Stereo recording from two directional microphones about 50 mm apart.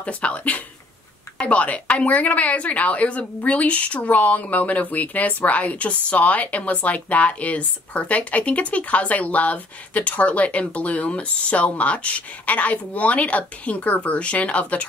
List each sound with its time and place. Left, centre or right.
0.0 s speech: left